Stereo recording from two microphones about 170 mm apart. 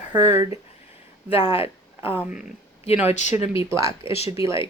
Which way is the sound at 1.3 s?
15° right (ahead or behind).